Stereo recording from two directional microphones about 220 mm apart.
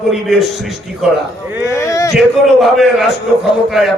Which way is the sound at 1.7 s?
15° left (ahead or behind).